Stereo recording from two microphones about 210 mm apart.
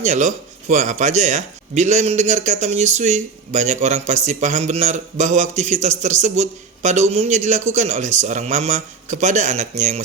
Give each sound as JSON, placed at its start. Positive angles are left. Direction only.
{"t": 0.0, "sound": "speech", "side_deg": -35}